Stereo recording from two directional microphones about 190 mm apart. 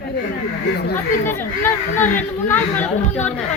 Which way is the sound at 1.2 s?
10° left (ahead or behind).